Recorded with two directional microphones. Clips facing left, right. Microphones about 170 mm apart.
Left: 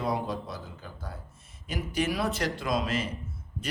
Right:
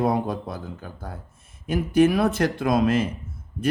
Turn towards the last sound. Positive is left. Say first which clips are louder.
# right 9 dB
turn(degrees=-50)  # may be behind; listen again after turning